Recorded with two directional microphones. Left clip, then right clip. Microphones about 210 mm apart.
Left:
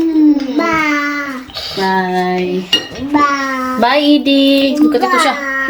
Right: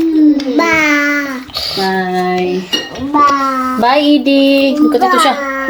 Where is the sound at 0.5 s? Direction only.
30° right (ahead or behind).